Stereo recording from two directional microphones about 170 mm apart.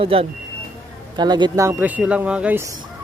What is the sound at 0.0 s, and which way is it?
Speech, 35° right (ahead or behind).